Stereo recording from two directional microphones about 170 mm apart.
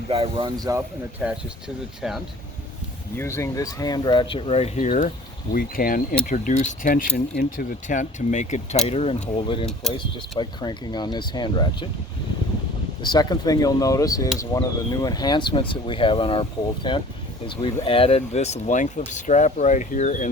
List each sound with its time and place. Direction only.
0.1 s speech: 30° right (ahead or behind)
1.2 s speech: 5° right (ahead or behind)
3.2 s speech: 15° left (ahead or behind)
13.0 s speech: 25° left (ahead or behind); by 20.3 s 45° left (ahead or behind)